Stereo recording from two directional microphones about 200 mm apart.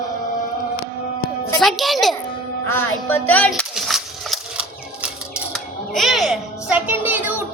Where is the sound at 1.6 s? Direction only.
Centre (ahead or behind).